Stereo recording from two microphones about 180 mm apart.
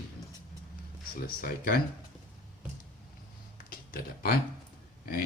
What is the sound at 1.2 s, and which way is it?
Speech, 55° left (ahead or behind).